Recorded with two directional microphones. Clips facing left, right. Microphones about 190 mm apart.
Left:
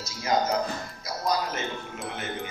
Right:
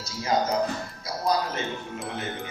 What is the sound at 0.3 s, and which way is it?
Speech, 30° right (ahead or behind).